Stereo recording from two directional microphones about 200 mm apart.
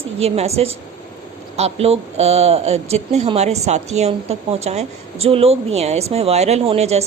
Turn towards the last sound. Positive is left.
turn(degrees=-30)  # may be behind; listen again after turning